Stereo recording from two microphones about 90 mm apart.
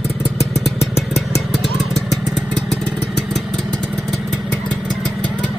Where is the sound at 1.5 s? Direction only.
Centre (ahead or behind).